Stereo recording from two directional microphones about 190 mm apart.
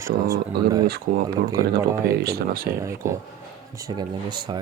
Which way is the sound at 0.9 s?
50° right (ahead or behind).